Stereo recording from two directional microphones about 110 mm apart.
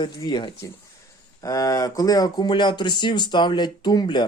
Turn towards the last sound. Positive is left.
turn(degrees=40)  # may be behind; listen again after turning